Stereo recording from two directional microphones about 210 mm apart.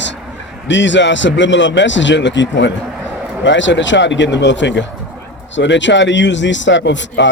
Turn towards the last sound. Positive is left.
turn(degrees=60)  # may be behind; listen again after turning